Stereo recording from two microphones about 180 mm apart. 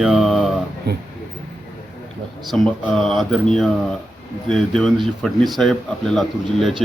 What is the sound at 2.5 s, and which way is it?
A man's voice, centre (ahead or behind).